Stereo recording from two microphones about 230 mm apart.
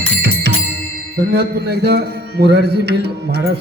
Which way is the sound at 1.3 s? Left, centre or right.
Right.